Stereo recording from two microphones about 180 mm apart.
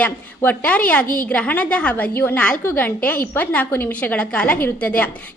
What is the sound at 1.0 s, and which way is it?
Speech, 50° left (ahead or behind).